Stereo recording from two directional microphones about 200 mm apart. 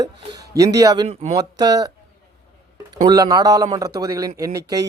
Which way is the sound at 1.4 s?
20° right (ahead or behind).